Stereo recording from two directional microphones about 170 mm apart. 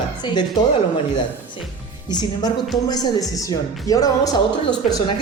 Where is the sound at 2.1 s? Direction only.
25° left (ahead or behind).